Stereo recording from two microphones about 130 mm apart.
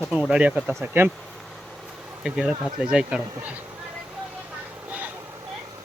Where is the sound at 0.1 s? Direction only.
Centre (ahead or behind); by 1.1 s 20° right (ahead or behind).